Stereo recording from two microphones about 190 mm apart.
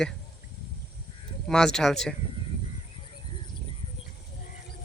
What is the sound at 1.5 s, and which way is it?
Speech, 5° left (ahead or behind).